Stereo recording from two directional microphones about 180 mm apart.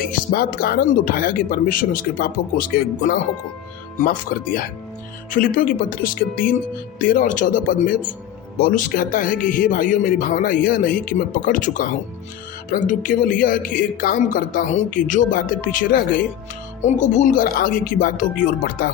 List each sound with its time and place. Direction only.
0.3 s a man's voice: 60° left (ahead or behind)